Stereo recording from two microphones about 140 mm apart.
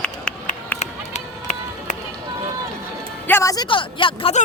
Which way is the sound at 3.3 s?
20° left (ahead or behind).